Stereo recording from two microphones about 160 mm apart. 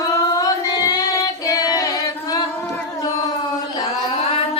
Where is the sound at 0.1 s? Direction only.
20° left (ahead or behind).